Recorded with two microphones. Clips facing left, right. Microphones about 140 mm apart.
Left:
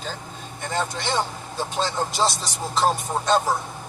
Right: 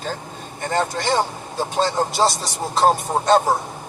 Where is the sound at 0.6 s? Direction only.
50° right (ahead or behind).